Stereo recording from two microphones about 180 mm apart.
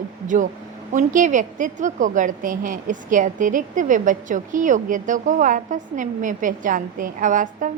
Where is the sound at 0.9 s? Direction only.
45° right (ahead or behind).